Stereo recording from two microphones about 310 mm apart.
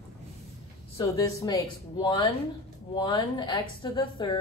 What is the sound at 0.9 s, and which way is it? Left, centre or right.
A woman's voice, centre.